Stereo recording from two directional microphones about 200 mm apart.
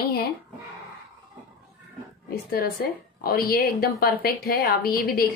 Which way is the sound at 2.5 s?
50° left (ahead or behind).